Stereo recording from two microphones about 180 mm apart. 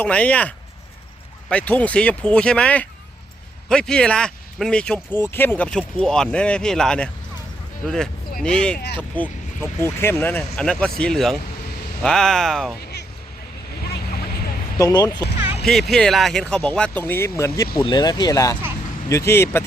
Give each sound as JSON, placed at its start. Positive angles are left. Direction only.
{"t": 0.0, "sound": "speech", "side_deg": 5}
{"t": 14.8, "sound": "speech", "side_deg": 20}
{"t": 15.6, "sound": "speech", "side_deg": 0}